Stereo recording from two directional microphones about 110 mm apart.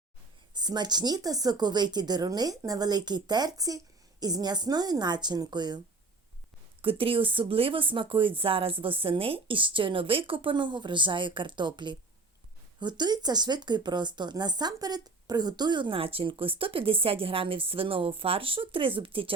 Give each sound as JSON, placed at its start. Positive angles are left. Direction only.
{"t": 0.5, "sound": "speech", "side_deg": -40}
{"t": 6.8, "sound": "speech", "side_deg": -55}